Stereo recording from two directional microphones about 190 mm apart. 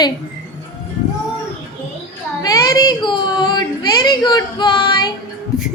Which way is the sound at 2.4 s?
20° left (ahead or behind).